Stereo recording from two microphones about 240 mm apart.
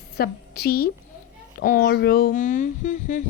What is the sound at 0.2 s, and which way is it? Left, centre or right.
A woman's voice, left.